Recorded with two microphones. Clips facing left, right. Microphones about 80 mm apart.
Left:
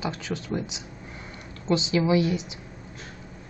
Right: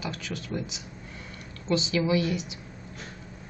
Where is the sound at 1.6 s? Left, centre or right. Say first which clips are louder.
Left 3 dB; centre.